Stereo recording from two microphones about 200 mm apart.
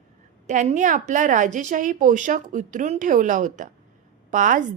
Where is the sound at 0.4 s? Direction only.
35° right (ahead or behind).